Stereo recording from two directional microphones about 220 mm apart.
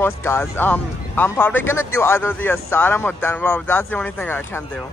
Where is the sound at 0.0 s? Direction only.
10° left (ahead or behind).